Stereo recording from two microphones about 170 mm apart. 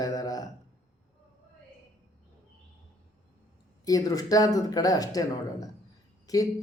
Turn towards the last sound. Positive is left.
turn(degrees=20)  # may be behind; listen again after turning